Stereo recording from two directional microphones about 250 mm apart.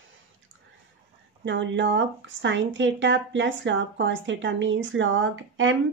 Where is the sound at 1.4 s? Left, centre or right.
Right.